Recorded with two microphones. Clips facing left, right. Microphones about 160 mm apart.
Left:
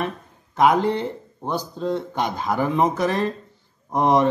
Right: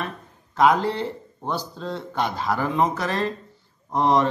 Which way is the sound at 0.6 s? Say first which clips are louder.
Left 1 dB; 15° left (ahead or behind).